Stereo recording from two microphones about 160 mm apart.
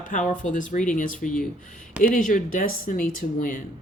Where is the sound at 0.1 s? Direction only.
55° left (ahead or behind).